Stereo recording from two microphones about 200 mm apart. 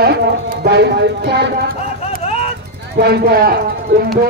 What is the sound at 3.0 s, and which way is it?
Speech, 50° right (ahead or behind).